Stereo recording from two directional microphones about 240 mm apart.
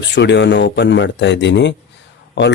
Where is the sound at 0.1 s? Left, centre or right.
Left.